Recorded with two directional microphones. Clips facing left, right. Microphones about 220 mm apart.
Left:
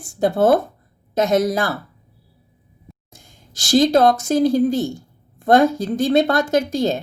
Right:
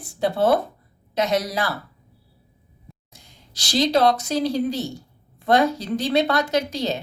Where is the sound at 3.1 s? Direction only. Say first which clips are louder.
Left 3 dB; 50° left (ahead or behind).